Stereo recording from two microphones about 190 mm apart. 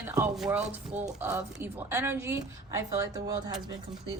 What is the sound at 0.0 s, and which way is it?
Speech, 10° right (ahead or behind).